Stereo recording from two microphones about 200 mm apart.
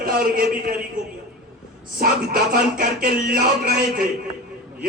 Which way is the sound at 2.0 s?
45° right (ahead or behind).